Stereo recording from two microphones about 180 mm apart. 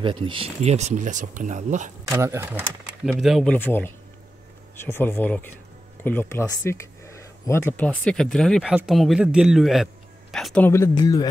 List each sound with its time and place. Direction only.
0.0 s speech: 30° right (ahead or behind)
2.0 s speech: 15° right (ahead or behind)
3.1 s a man's voice: centre (ahead or behind)
3.5 s a man's voice: 10° left (ahead or behind)